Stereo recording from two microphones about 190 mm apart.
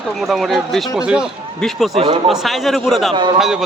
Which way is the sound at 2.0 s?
30° right (ahead or behind).